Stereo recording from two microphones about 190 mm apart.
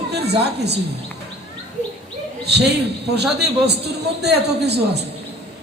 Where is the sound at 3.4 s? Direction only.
60° right (ahead or behind).